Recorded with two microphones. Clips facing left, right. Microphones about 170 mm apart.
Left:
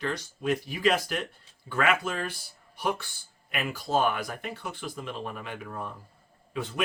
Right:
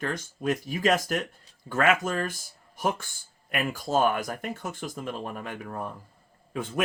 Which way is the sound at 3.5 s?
45° right (ahead or behind).